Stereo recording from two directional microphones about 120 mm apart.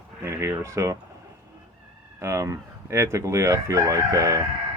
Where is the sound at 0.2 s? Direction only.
20° right (ahead or behind).